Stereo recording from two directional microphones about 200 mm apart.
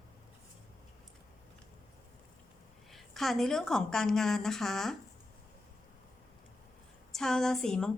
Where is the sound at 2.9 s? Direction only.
Centre (ahead or behind).